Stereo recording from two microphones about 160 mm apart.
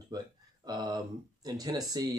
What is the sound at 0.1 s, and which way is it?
Speech, 25° right (ahead or behind).